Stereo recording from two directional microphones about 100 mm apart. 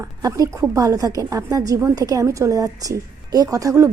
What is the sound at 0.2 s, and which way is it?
A woman's voice, 35° right (ahead or behind).